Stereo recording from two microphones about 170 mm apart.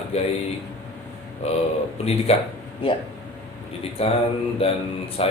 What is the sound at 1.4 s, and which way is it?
Speech, 40° left (ahead or behind).